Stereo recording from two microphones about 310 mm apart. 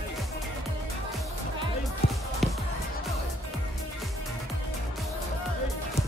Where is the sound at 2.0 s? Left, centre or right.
Left.